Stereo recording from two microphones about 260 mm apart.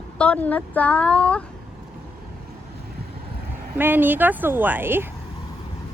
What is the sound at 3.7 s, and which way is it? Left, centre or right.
Speech, centre.